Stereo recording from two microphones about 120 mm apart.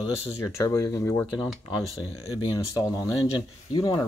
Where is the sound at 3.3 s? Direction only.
35° left (ahead or behind).